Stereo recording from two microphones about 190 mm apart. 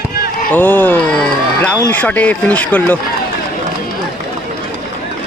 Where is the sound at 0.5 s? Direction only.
10° left (ahead or behind).